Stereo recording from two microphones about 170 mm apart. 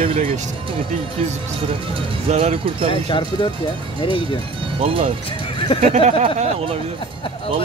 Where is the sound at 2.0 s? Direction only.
35° right (ahead or behind).